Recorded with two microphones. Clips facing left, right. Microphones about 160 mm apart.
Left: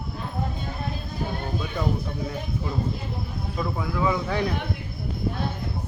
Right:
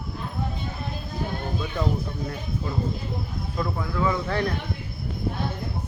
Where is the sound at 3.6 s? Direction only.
10° left (ahead or behind).